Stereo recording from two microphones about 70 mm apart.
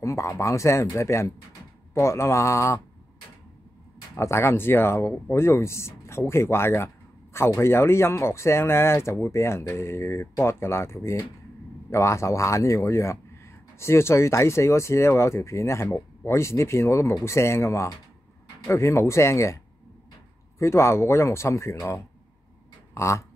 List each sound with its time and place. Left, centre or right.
0.0 s speech: left
4.2 s speech: left
22.9 s a sound: left